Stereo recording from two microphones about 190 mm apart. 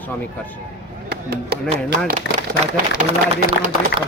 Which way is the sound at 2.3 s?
65° left (ahead or behind).